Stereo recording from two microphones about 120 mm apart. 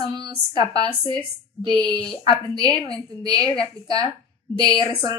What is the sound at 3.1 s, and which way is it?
A woman's voice, 35° right (ahead or behind).